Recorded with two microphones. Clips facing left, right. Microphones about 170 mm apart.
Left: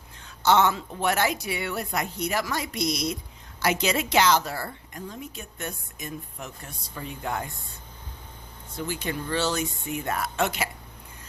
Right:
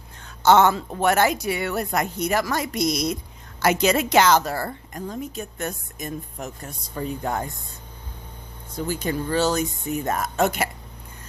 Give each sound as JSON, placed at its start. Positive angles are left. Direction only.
{"t": 0.3, "sound": "a woman's voice", "side_deg": -50}
{"t": 8.7, "sound": "a woman's voice", "side_deg": -40}